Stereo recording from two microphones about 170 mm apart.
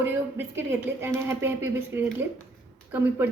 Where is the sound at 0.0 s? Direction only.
15° right (ahead or behind).